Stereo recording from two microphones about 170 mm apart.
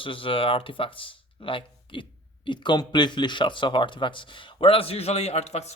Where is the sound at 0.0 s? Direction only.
30° left (ahead or behind).